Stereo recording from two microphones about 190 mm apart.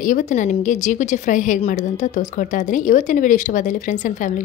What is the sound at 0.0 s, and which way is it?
A woman's voice, 45° left (ahead or behind).